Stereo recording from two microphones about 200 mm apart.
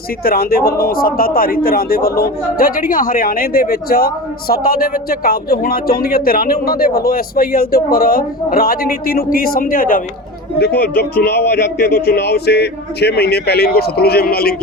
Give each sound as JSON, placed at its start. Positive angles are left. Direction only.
{"t": 0.3, "sound": "a man's voice", "side_deg": 50}